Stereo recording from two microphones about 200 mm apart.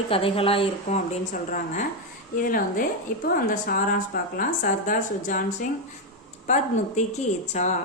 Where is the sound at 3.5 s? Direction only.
45° left (ahead or behind).